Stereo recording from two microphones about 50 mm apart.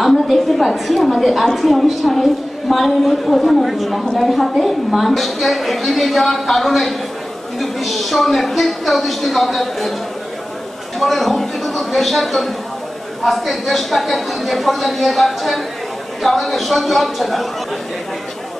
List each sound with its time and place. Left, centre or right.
0.0 s a woman's voice: centre
11.0 s a woman's voice: centre